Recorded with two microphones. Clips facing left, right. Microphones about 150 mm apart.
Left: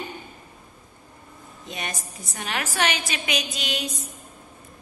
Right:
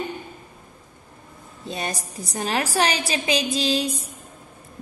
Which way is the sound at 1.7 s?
35° right (ahead or behind).